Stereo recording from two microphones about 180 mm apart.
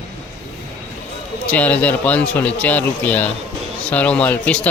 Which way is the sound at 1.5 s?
10° left (ahead or behind).